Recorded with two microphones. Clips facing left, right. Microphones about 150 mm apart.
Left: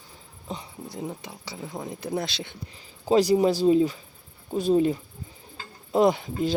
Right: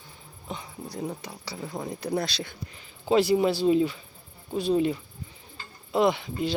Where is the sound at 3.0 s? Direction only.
40° left (ahead or behind).